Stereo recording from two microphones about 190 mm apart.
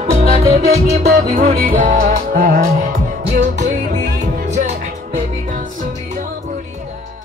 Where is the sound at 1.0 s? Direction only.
55° right (ahead or behind).